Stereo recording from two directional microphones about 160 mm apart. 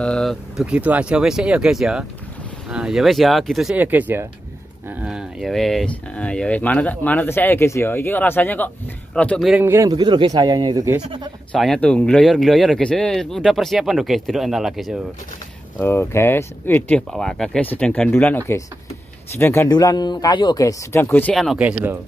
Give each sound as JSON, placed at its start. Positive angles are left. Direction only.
{"t": 0.0, "sound": "speech", "side_deg": 5}
{"t": 3.7, "sound": "speech", "side_deg": -10}
{"t": 9.6, "sound": "speech", "side_deg": -15}
{"t": 9.8, "sound": "speech", "side_deg": -25}
{"t": 11.5, "sound": "speech", "side_deg": 5}
{"t": 15.8, "sound": "speech", "side_deg": 15}
{"t": 21.4, "sound": "speech", "side_deg": -5}